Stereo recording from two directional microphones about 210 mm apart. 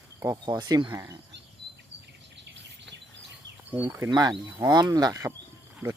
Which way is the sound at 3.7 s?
10° right (ahead or behind).